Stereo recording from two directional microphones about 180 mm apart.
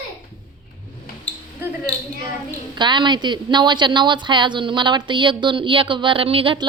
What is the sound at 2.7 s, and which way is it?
A woman's voice, 25° right (ahead or behind).